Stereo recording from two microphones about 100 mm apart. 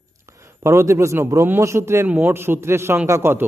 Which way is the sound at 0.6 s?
30° right (ahead or behind).